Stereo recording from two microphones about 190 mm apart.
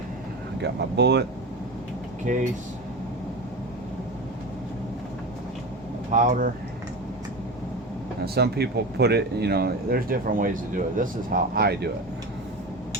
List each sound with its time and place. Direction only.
0.6 s speech: 65° right (ahead or behind)
2.3 s speech: 45° right (ahead or behind)
6.1 s speech: 45° right (ahead or behind)
8.2 s speech: 55° right (ahead or behind)